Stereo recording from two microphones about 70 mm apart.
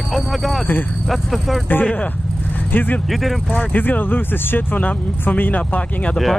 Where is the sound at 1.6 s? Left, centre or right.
Left.